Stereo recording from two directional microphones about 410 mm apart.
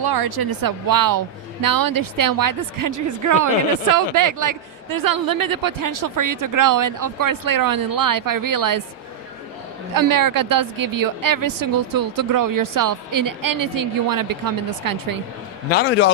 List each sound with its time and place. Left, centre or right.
0.0 s speech: right
9.9 s speech: right
15.7 s a man's voice: left